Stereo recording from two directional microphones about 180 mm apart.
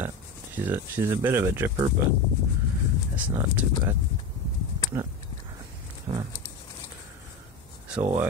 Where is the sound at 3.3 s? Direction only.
15° right (ahead or behind).